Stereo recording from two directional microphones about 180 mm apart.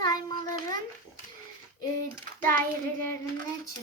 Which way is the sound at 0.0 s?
20° left (ahead or behind).